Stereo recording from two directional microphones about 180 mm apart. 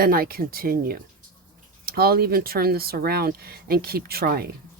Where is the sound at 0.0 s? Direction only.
55° right (ahead or behind).